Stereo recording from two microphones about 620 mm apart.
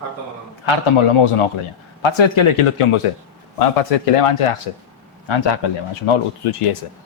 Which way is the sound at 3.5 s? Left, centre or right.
Left.